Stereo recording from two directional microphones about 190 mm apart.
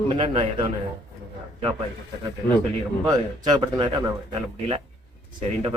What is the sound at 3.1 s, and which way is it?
Speech, 20° right (ahead or behind).